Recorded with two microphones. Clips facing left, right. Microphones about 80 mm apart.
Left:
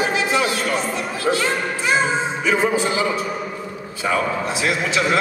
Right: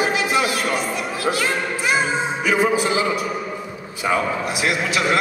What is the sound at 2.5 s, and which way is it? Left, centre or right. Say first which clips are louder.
Speech: right 1 dB; centre.